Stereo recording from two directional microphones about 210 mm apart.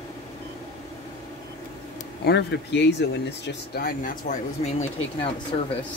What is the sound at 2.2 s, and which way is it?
Speech, 55° left (ahead or behind).